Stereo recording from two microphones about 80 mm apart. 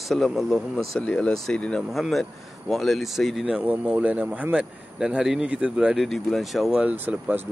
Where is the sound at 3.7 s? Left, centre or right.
Centre.